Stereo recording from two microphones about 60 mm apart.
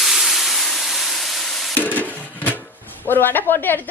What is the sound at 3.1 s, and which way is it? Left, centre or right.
Speech, left.